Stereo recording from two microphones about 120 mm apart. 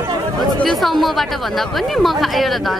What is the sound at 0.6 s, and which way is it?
A woman's voice, centre (ahead or behind).